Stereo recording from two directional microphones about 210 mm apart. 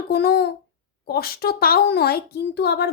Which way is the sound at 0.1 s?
50° left (ahead or behind).